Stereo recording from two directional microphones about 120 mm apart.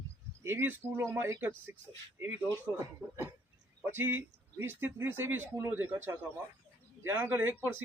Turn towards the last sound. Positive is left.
turn(degrees=-15)  # may be behind; listen again after turning